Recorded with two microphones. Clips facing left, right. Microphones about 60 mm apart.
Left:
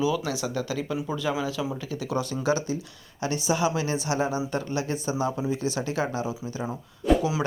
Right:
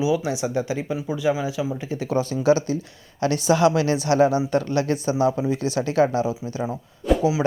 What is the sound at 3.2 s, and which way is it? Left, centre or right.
Speech, right.